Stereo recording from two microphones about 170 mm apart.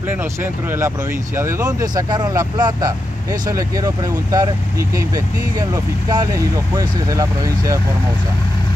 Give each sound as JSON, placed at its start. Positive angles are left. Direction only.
{"t": 0.1, "sound": "speech", "side_deg": -10}